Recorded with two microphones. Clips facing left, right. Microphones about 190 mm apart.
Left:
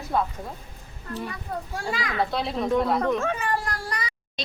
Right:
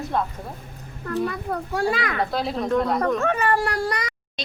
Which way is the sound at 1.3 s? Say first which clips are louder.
Right 5 dB; 65° right (ahead or behind).